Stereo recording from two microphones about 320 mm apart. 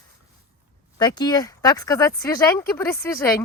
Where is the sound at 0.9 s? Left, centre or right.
Centre.